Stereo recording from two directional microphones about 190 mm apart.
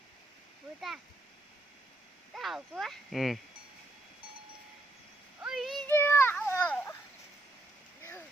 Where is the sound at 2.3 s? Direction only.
Centre (ahead or behind).